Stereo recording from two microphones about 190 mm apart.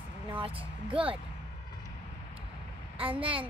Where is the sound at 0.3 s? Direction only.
25° right (ahead or behind).